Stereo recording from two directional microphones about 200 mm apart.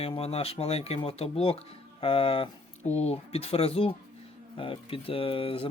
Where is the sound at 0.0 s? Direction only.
30° left (ahead or behind).